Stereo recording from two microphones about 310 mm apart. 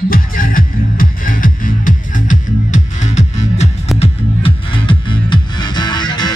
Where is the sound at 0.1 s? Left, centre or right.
Left.